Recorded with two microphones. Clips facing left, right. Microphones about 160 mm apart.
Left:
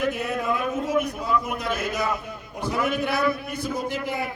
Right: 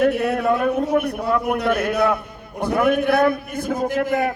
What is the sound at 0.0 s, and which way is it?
A man's voice, 70° right (ahead or behind).